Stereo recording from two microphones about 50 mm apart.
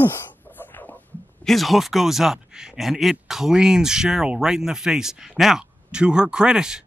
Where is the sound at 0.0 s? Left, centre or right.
Left.